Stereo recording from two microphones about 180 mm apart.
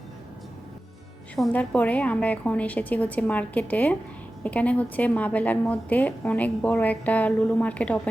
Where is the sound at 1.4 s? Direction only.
5° left (ahead or behind).